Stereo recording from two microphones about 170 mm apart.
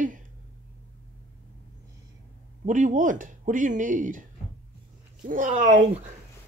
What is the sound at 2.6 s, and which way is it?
Speech, 50° right (ahead or behind).